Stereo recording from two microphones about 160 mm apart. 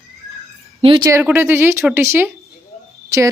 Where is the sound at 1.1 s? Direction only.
15° right (ahead or behind).